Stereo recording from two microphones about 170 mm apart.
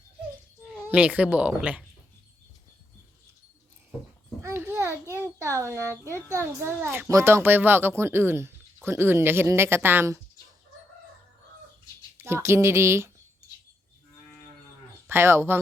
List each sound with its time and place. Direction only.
0.6 s speech: 5° right (ahead or behind)
4.4 s a child's voice: 15° right (ahead or behind)
12.1 s speech: 15° right (ahead or behind)
15.1 s speech: 15° right (ahead or behind)